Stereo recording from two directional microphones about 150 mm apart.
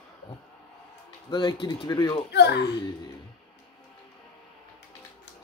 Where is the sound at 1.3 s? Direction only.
30° left (ahead or behind).